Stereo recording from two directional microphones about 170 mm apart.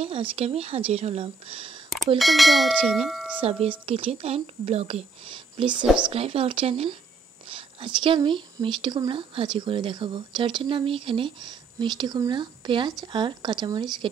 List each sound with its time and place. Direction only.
0.0 s speech: 35° right (ahead or behind)
2.1 s bell: centre (ahead or behind)
3.8 s speech: 35° right (ahead or behind)